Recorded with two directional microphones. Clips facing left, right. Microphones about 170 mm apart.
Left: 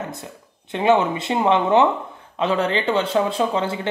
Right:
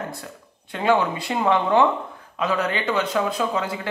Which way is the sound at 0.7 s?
20° left (ahead or behind).